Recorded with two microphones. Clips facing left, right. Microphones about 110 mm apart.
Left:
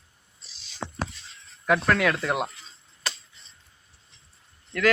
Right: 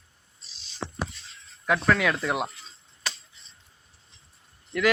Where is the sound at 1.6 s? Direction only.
Centre (ahead or behind).